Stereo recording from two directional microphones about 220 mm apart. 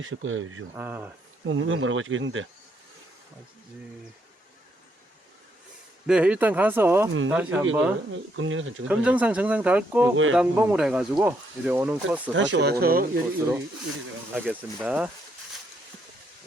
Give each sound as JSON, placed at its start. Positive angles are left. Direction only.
{"t": 0.0, "sound": "speech", "side_deg": -60}
{"t": 0.8, "sound": "speech", "side_deg": -10}
{"t": 1.5, "sound": "speech", "side_deg": -60}
{"t": 6.1, "sound": "speech", "side_deg": -5}
{"t": 8.4, "sound": "speech", "side_deg": -65}
{"t": 9.0, "sound": "speech", "side_deg": -5}
{"t": 12.3, "sound": "speech", "side_deg": -55}
{"t": 14.3, "sound": "speech", "side_deg": -5}